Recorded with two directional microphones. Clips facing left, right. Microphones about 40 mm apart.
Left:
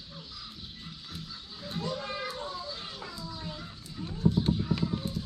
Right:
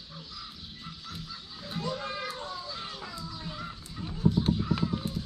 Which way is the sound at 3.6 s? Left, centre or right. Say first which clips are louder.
Right 2 dB; centre.